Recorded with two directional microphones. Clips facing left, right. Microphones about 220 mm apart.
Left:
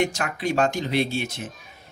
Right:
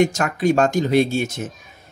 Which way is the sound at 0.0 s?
45° right (ahead or behind).